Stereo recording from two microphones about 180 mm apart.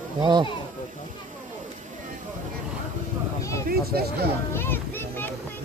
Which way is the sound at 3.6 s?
60° right (ahead or behind).